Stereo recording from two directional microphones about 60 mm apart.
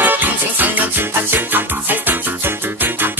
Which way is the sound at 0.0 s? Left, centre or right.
Right.